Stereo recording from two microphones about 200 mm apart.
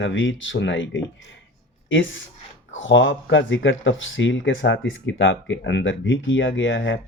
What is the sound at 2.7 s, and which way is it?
Speech, 70° left (ahead or behind).